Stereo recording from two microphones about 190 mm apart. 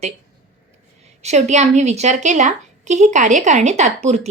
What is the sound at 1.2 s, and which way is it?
Speech, 35° right (ahead or behind).